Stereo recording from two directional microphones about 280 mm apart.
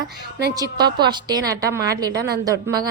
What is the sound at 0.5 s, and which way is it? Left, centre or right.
A woman's voice, centre.